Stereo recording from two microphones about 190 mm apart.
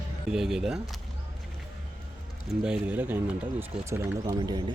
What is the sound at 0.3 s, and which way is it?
Speech, 5° right (ahead or behind).